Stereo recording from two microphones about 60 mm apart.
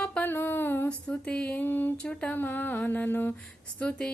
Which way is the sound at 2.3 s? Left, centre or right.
Left.